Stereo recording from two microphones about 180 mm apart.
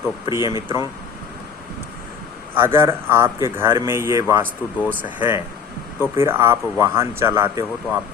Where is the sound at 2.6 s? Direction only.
15° right (ahead or behind).